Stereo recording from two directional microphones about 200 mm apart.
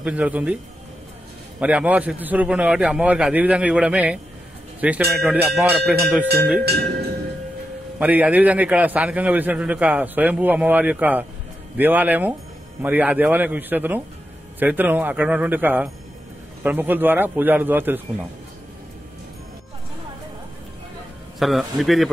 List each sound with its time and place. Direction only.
0.0 s a man's voice: 5° right (ahead or behind)
1.6 s a man's voice: 5° right (ahead or behind)
6.2 s speech: 50° right (ahead or behind)
8.0 s a man's voice: 10° right (ahead or behind)
21.4 s a man's voice: centre (ahead or behind)